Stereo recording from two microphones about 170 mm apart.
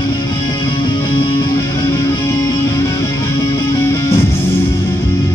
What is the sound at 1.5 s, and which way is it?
Music, 15° left (ahead or behind).